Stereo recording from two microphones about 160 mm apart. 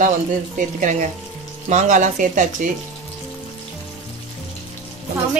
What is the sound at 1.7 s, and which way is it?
Speech, 50° right (ahead or behind).